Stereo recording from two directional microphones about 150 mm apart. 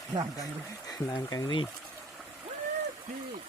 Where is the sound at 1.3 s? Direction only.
25° left (ahead or behind).